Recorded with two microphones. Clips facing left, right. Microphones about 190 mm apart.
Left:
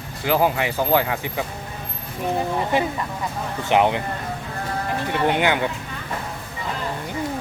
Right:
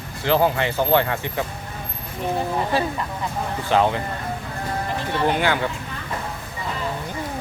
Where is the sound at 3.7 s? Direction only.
20° left (ahead or behind).